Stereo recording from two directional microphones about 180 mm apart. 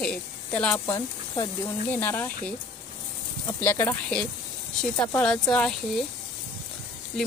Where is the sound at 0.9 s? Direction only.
25° left (ahead or behind).